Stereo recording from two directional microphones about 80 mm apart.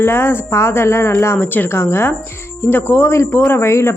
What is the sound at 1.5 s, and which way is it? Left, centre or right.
A woman's voice, left.